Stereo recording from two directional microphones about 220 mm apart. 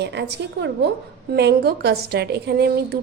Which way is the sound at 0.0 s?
50° right (ahead or behind).